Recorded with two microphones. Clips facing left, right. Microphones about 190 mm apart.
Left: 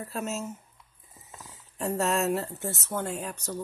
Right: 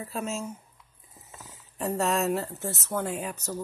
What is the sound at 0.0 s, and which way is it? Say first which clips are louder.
Speech: even; centre (ahead or behind).